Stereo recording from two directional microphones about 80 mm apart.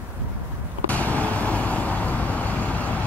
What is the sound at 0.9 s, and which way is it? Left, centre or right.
Vehicle, centre.